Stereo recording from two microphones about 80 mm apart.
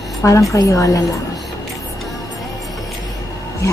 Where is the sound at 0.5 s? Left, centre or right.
Left.